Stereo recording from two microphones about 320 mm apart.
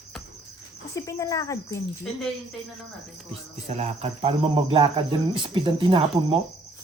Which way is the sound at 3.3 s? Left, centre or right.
Centre.